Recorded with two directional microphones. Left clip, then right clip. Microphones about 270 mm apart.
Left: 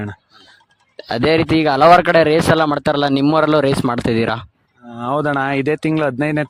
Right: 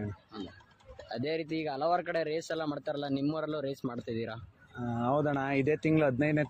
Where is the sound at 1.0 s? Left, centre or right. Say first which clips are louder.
Left 19 dB; left.